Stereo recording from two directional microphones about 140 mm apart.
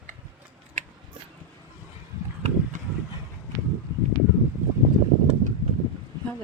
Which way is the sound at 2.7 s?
65° right (ahead or behind).